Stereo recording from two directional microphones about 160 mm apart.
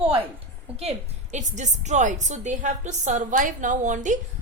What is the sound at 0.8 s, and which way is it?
A woman's voice, 45° right (ahead or behind).